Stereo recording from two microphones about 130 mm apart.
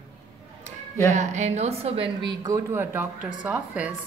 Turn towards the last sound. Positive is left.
turn(degrees=-10)  # may be behind; listen again after turning